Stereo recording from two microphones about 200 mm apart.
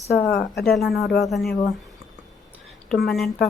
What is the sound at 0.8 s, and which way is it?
Speech, centre (ahead or behind).